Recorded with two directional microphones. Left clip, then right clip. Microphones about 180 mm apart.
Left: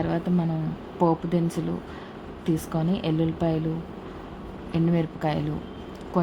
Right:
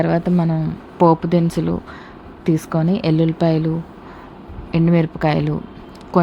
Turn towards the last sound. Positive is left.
turn(degrees=-30)  # may be behind; listen again after turning